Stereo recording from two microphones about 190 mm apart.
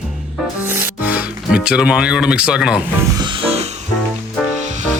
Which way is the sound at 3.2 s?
25° right (ahead or behind).